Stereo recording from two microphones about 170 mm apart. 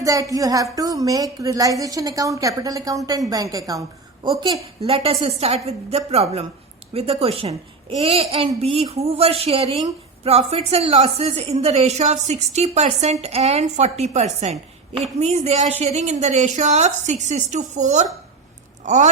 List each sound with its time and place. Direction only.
0.0 s a woman's voice: 20° right (ahead or behind)
4.8 s a woman's voice: 35° right (ahead or behind)
18.8 s a sound: 45° right (ahead or behind)